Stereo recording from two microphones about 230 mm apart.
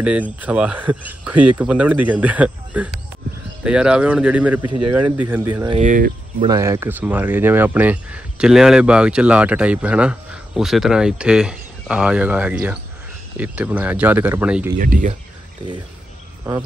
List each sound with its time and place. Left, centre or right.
0.0 s speech: centre
5.8 s speech: right
6.4 s speech: centre
14.8 s speech: right